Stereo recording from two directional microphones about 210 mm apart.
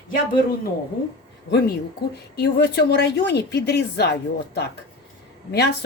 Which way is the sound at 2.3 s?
50° left (ahead or behind).